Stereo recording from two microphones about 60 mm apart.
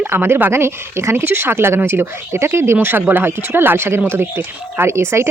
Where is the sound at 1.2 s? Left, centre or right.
Right.